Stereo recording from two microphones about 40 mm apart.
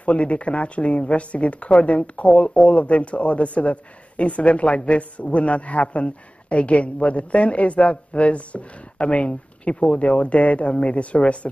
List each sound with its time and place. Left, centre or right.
0.0 s speech: left